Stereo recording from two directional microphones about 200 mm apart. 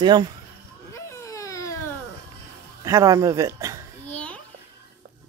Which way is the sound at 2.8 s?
15° right (ahead or behind).